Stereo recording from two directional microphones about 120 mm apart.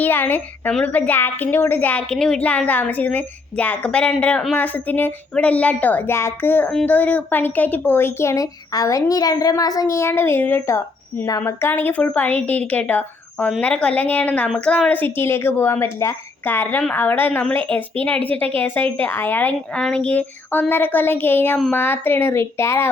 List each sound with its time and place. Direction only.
0.0 s a woman's voice: 15° left (ahead or behind)